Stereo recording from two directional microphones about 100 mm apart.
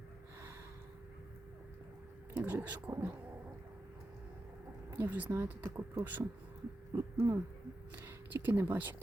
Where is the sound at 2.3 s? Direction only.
15° right (ahead or behind).